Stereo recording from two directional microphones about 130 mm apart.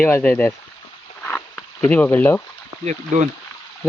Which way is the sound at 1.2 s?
15° left (ahead or behind).